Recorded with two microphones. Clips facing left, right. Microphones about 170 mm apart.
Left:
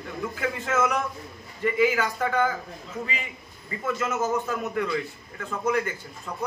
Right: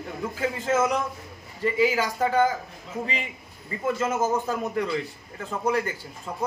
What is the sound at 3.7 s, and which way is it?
A man's voice, 30° right (ahead or behind).